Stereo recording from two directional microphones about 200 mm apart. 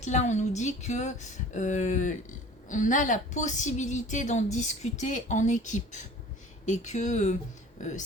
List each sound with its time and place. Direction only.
0.0 s speech: 35° left (ahead or behind)